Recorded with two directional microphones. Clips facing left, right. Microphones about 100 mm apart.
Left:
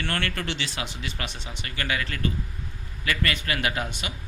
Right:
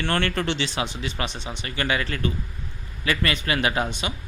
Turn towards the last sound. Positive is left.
turn(degrees=-25)  # may be behind; listen again after turning